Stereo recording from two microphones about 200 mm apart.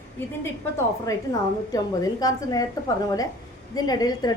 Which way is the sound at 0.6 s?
15° left (ahead or behind).